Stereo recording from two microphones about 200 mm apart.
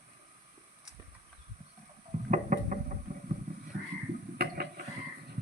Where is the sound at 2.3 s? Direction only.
40° right (ahead or behind).